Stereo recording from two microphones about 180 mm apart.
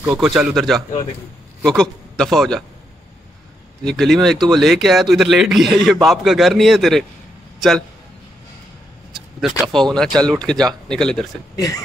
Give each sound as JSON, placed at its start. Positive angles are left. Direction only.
{"t": 0.0, "sound": "speech", "side_deg": -5}
{"t": 3.8, "sound": "speech", "side_deg": 0}
{"t": 9.1, "sound": "speech", "side_deg": 0}
{"t": 11.5, "sound": "speech", "side_deg": 20}